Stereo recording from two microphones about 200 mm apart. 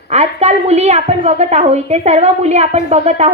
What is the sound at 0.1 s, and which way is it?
A woman's voice, 35° right (ahead or behind).